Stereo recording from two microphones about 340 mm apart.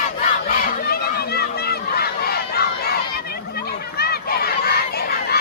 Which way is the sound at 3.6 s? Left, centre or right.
Left.